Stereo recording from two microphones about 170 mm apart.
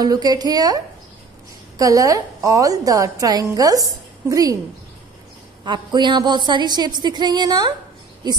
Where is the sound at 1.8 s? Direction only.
20° right (ahead or behind).